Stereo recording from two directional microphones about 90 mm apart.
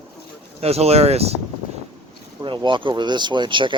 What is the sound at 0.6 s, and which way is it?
Speech, 90° right.